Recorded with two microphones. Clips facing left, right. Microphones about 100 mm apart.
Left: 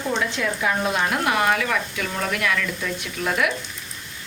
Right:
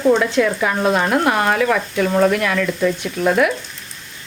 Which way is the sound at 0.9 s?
45° right (ahead or behind).